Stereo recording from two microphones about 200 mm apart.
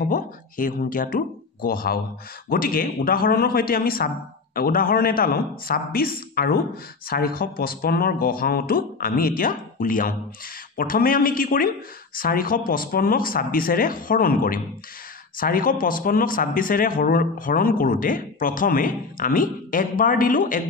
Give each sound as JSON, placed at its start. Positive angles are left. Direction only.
{"t": 0.1, "sound": "speech", "side_deg": 45}